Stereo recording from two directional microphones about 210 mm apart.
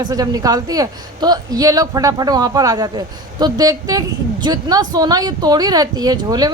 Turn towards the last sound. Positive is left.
turn(degrees=-20)  # may be behind; listen again after turning